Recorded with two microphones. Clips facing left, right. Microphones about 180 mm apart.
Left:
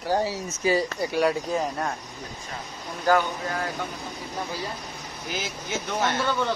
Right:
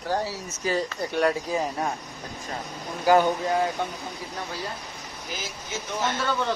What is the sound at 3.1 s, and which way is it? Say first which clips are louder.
Speech: right 2 dB; 10° right (ahead or behind).